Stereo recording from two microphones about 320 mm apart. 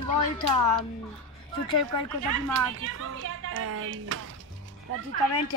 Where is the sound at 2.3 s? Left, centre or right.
Right.